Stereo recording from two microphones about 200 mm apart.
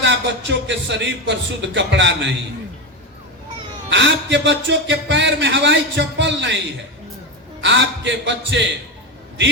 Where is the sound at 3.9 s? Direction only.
65° right (ahead or behind).